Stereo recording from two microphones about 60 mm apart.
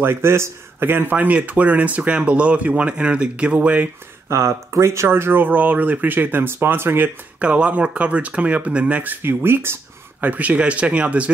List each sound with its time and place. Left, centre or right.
0.0 s speech: right
4.3 s speech: right
7.3 s speech: right
10.2 s speech: right